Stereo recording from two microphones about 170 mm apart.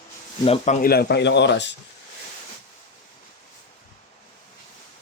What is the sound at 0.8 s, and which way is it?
Speech, 65° left (ahead or behind).